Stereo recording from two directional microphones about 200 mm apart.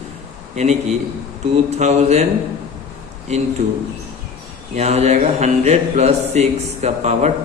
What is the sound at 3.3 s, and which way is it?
Speech, 35° right (ahead or behind).